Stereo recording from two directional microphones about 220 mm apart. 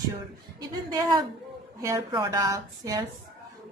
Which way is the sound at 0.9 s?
15° right (ahead or behind).